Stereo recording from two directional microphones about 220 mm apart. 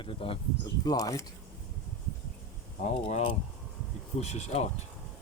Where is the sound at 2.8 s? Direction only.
30° left (ahead or behind).